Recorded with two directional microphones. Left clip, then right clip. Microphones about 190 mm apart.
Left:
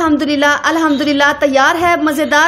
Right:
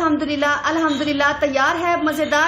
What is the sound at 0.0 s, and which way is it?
A woman's voice, 40° left (ahead or behind).